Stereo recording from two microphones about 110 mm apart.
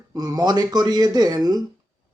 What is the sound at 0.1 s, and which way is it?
Speech, 35° right (ahead or behind).